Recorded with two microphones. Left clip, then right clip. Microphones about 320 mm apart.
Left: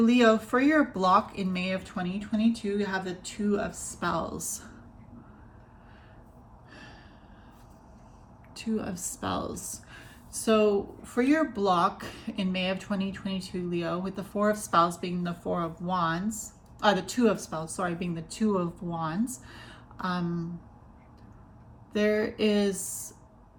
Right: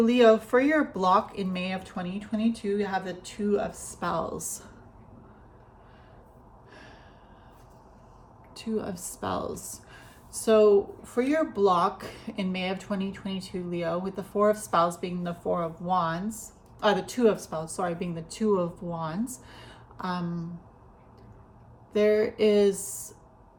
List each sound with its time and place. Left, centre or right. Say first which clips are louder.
0.0 s speech: right 3 dB; centre
8.5 s speech: right 1 dB; centre
9.6 s a sound: left 1 dB; centre
10.5 s speech: right 4 dB; right
11.0 s speech: even; centre
21.9 s speech: right 4 dB; centre